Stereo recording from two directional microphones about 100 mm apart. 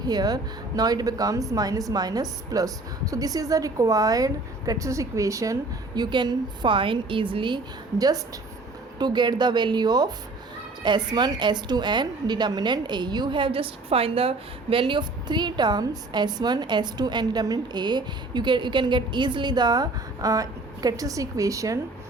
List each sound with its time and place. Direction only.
0.0 s a woman's voice: 40° right (ahead or behind)
7.9 s a woman's voice: 40° right (ahead or behind)